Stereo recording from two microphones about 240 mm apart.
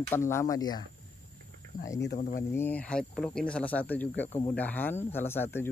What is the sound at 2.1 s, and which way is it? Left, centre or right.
Speech, left.